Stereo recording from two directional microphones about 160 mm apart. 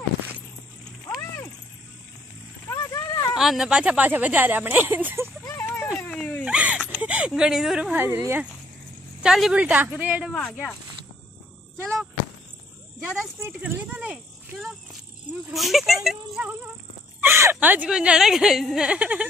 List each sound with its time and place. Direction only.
2.7 s a sound: 20° left (ahead or behind)
3.3 s a woman's voice: centre (ahead or behind)
5.4 s a sound: 20° left (ahead or behind)
5.9 s dog: 5° left (ahead or behind)
6.4 s speech: 5° right (ahead or behind)
9.2 s a woman's voice: 5° right (ahead or behind)
13.0 s a woman's voice: 15° right (ahead or behind)